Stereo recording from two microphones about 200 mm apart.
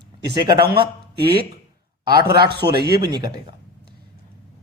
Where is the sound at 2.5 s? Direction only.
55° right (ahead or behind).